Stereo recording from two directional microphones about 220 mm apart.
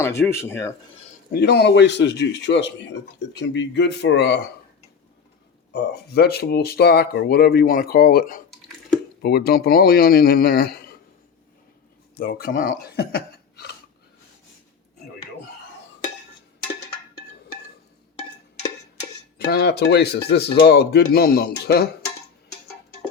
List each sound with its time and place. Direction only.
0.0 s speech: 10° left (ahead or behind)
1.3 s speech: 50° left (ahead or behind)
5.7 s speech: 50° left (ahead or behind)
12.1 s speech: 45° left (ahead or behind)
19.5 s speech: 50° left (ahead or behind)